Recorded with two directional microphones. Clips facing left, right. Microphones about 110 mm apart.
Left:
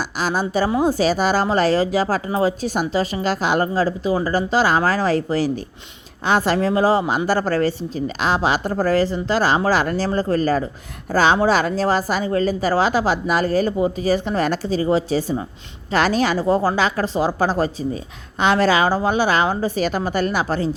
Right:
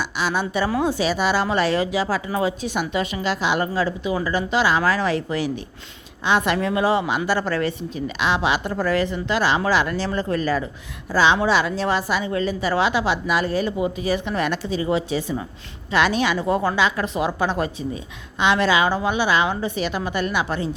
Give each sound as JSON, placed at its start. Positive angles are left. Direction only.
{"t": 0.0, "sound": "a woman's voice", "side_deg": 40}